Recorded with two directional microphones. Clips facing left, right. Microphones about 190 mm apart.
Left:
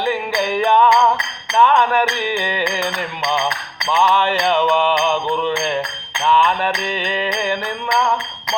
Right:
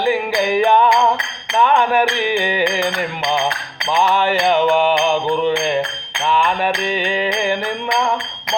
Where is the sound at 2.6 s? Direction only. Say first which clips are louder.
Right 3 dB; 55° right (ahead or behind).